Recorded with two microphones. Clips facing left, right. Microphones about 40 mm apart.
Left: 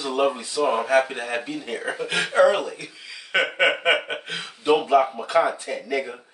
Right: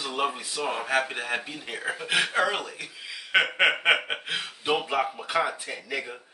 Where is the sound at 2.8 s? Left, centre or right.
Centre.